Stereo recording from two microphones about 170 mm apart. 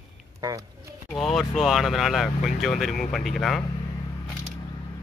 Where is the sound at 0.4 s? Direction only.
20° right (ahead or behind).